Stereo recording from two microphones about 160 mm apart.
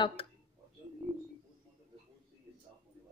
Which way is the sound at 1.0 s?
5° right (ahead or behind).